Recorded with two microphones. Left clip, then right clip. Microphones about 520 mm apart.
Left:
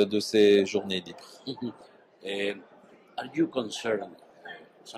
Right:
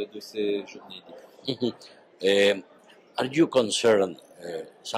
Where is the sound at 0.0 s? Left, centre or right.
Left.